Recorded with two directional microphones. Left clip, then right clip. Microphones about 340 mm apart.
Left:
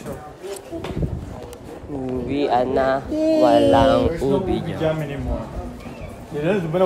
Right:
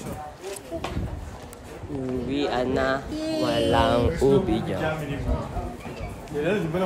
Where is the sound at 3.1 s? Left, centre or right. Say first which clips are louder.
Left 10 dB; left.